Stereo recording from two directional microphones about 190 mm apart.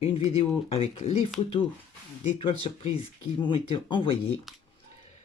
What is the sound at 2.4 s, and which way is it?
Speech, 25° left (ahead or behind).